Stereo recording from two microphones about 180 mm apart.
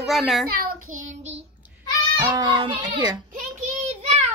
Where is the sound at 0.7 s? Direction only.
40° right (ahead or behind).